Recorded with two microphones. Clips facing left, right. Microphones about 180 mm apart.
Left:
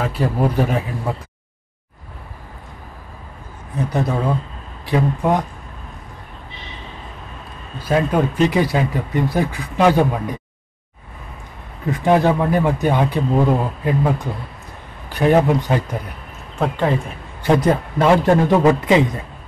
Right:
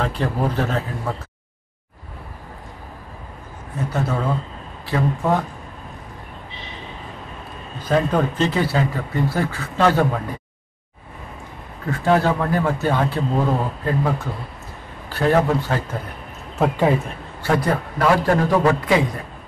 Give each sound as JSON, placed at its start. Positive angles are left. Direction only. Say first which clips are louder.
{"t": 0.0, "sound": "speech", "louder": "left 3 dB", "side_deg": 10}
{"t": 3.9, "sound": "speech", "louder": "left 2 dB", "side_deg": 15}
{"t": 7.8, "sound": "speech", "louder": "left 1 dB", "side_deg": 10}
{"t": 11.9, "sound": "speech", "louder": "left 3 dB", "side_deg": 15}
{"t": 16.5, "sound": "speech", "louder": "right 2 dB", "side_deg": -5}
{"t": 17.4, "sound": "a man's voice", "louder": "left 4 dB", "side_deg": 20}